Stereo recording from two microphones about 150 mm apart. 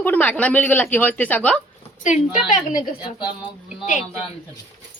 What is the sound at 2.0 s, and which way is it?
A woman's voice, 55° left (ahead or behind).